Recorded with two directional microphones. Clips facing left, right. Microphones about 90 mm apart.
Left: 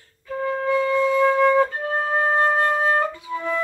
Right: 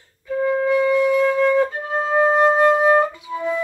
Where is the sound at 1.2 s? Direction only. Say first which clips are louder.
Even; 20° left (ahead or behind).